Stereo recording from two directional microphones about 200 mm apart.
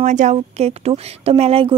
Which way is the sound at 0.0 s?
35° right (ahead or behind).